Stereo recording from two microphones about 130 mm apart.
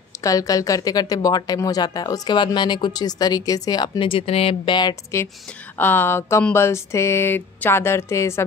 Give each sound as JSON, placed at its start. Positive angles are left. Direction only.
{"t": 0.2, "sound": "speech", "side_deg": 25}
{"t": 4.1, "sound": "speech", "side_deg": 50}
{"t": 5.8, "sound": "speech", "side_deg": 15}